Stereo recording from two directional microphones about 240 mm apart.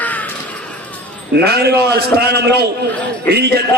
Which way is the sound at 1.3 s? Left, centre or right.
Right.